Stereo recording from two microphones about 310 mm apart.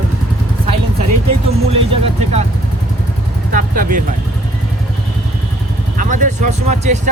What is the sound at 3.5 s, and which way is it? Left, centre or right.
Vehicle, right.